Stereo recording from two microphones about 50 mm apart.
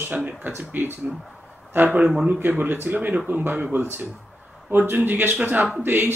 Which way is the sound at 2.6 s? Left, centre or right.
Right.